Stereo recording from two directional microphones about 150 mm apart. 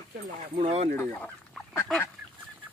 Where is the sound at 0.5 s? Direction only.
45° right (ahead or behind).